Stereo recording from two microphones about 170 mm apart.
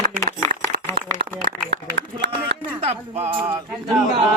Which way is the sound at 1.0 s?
70° right (ahead or behind).